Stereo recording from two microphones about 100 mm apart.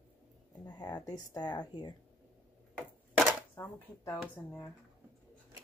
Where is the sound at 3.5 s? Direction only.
25° left (ahead or behind).